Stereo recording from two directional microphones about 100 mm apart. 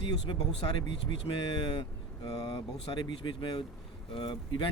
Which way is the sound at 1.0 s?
50° left (ahead or behind).